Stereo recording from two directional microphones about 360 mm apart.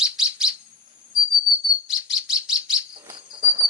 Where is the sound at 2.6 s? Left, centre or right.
Centre.